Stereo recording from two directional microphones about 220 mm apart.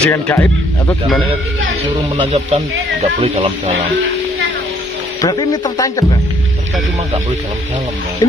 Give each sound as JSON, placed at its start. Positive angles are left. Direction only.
{"t": 0.0, "sound": "speech", "side_deg": 10}
{"t": 1.0, "sound": "a man's voice", "side_deg": 0}
{"t": 2.1, "sound": "speech", "side_deg": -30}
{"t": 5.2, "sound": "speech", "side_deg": 20}
{"t": 8.2, "sound": "speech", "side_deg": 15}